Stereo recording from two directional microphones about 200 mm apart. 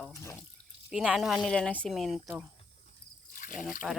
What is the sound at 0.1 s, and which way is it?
Water, 15° left (ahead or behind).